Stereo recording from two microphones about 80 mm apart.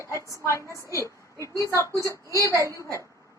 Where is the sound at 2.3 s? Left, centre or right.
Left.